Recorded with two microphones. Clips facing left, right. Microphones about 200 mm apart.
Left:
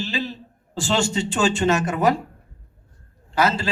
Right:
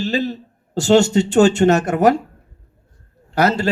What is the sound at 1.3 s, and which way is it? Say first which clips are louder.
Speech: right 9 dB; 65° right (ahead or behind).